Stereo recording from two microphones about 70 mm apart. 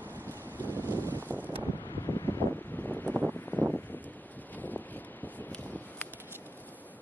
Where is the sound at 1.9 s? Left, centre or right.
Left.